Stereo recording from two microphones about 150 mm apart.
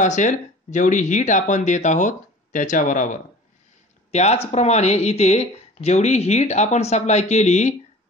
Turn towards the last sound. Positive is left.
turn(degrees=50)  # may be behind; listen again after turning